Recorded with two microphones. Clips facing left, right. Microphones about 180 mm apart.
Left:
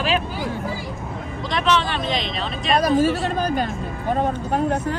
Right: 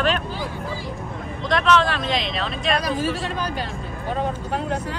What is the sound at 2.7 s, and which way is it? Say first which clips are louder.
Speech: left 6 dB; 45° left (ahead or behind).